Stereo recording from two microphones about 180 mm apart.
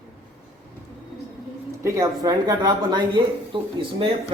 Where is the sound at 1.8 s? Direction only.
20° right (ahead or behind).